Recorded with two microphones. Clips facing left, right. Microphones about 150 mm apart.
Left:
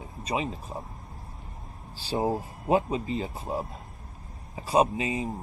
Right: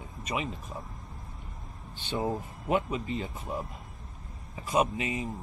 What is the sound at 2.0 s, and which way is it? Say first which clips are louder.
Speech: left 4 dB; 35° left (ahead or behind).